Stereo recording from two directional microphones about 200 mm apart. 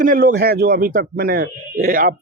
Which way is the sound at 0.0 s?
45° right (ahead or behind).